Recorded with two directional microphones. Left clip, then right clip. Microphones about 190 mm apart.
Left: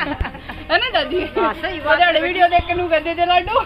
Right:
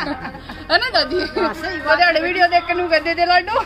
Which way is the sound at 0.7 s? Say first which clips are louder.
Right 1 dB; 25° right (ahead or behind).